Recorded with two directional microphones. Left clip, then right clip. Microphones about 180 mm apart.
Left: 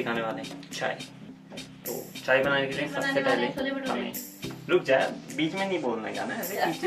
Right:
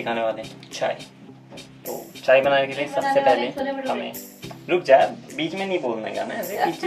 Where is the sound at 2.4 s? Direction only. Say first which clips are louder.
Right 6 dB; centre (ahead or behind).